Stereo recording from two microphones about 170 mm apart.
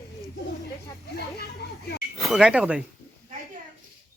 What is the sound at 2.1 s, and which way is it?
Speech, centre (ahead or behind).